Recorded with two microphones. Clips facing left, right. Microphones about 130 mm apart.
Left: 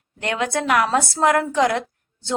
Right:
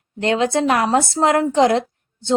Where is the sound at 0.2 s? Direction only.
30° right (ahead or behind).